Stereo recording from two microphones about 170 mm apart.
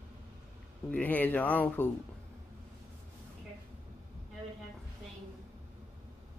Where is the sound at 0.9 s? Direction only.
10° left (ahead or behind).